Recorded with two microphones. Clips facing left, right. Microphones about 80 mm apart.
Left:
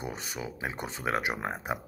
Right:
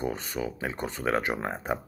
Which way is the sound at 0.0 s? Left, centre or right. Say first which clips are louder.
Right 6 dB; centre.